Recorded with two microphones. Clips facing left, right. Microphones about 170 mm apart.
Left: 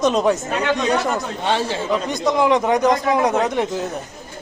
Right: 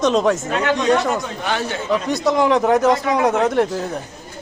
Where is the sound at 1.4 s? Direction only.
30° left (ahead or behind).